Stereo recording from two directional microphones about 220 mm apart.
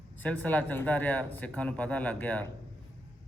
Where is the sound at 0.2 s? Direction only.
5° left (ahead or behind).